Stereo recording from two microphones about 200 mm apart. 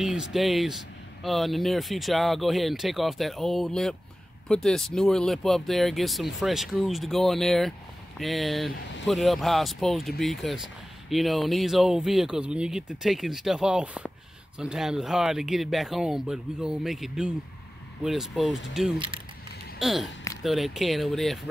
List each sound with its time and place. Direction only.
0.0 s speech: centre (ahead or behind)
18.9 s speech: 25° right (ahead or behind)
19.8 s speech: centre (ahead or behind)